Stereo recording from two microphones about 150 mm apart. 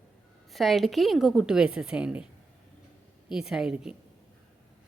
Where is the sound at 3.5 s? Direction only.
5° right (ahead or behind).